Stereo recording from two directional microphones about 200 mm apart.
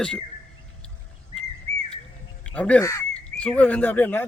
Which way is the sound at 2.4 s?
5° left (ahead or behind).